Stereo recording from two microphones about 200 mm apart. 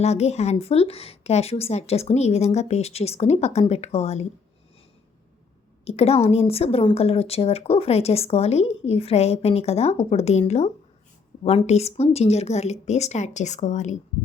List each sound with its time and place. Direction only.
0.0 s a woman's voice: 30° left (ahead or behind)
5.8 s a woman's voice: 30° left (ahead or behind)